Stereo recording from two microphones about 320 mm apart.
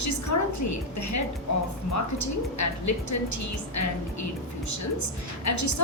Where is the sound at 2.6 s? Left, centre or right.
Left.